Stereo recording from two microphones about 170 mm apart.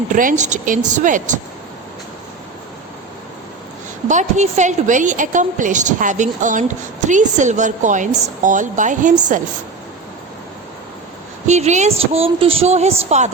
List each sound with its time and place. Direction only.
0.1 s a woman's voice: 50° right (ahead or behind)
4.1 s a woman's voice: 45° right (ahead or behind)
11.4 s a woman's voice: 45° right (ahead or behind)